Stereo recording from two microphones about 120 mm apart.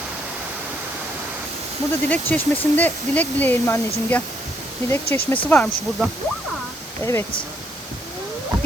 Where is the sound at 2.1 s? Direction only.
15° left (ahead or behind).